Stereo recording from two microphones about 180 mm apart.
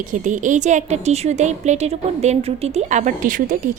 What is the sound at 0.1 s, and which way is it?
A woman's voice, 45° right (ahead or behind).